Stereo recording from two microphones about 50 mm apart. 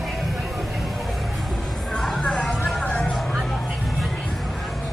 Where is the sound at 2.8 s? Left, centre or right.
Left.